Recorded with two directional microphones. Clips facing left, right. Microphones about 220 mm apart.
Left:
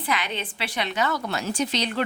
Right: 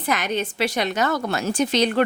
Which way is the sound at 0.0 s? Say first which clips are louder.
Right 5 dB; 45° right (ahead or behind).